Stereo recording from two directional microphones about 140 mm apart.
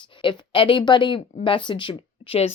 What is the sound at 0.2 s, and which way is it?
Speech, 35° left (ahead or behind).